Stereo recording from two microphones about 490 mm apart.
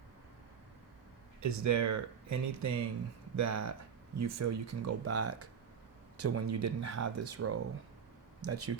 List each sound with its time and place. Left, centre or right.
1.4 s speech: right